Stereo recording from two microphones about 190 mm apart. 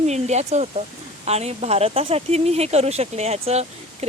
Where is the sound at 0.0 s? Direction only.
35° right (ahead or behind).